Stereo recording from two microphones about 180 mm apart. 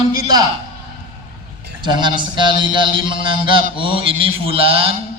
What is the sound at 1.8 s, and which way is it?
A man's voice, 25° right (ahead or behind).